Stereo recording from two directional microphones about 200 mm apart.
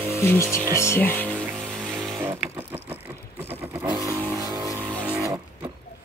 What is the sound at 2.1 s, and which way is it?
Vehicle, 10° right (ahead or behind).